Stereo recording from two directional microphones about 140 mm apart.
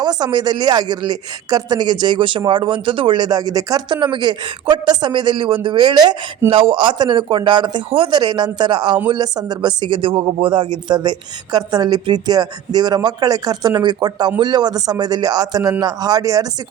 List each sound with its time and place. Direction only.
0.0 s speech: 30° right (ahead or behind)